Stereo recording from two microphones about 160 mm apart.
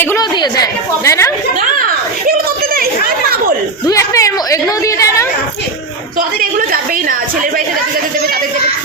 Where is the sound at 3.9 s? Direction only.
20° left (ahead or behind).